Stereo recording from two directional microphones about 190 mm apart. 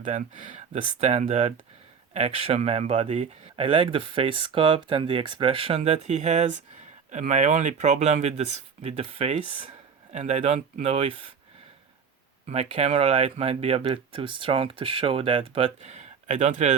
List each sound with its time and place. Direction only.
0.0 s speech: 40° right (ahead or behind)
12.5 s speech: 35° right (ahead or behind)